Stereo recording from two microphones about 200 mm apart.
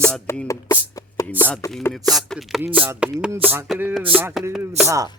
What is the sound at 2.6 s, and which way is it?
Chopping, 10° right (ahead or behind).